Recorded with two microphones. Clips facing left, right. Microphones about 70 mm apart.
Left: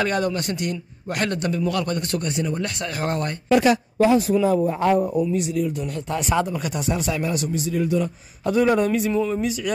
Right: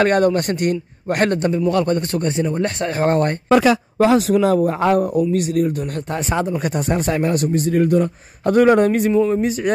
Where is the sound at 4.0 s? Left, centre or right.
Right.